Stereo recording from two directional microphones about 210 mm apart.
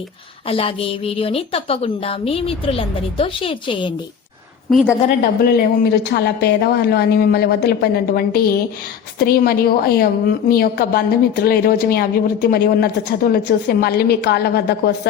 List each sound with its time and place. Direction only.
0.4 s a woman's voice: 25° left (ahead or behind)
4.7 s a woman's voice: centre (ahead or behind)
5.0 s a woman's voice: 45° left (ahead or behind)